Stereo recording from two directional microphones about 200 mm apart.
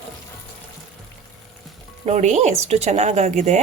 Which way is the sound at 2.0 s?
35° right (ahead or behind).